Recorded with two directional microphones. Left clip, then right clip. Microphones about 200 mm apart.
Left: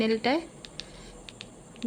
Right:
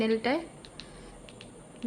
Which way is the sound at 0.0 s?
10° left (ahead or behind).